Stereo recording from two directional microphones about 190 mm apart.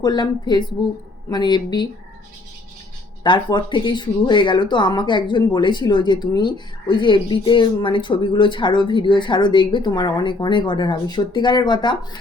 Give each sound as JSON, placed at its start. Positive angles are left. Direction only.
{"t": 0.0, "sound": "speech", "side_deg": 20}
{"t": 3.2, "sound": "speech", "side_deg": 25}